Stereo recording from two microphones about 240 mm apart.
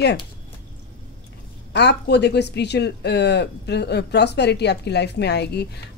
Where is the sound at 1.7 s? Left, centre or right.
Left.